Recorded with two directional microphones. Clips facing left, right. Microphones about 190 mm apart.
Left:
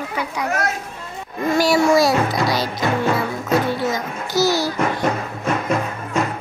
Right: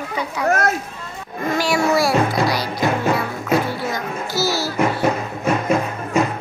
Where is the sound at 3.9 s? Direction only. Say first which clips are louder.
Left 2 dB; 20° left (ahead or behind).